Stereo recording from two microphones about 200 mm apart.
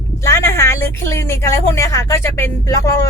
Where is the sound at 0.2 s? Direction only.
15° left (ahead or behind).